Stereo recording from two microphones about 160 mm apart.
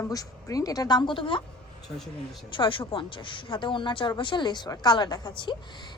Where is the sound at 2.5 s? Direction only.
30° left (ahead or behind).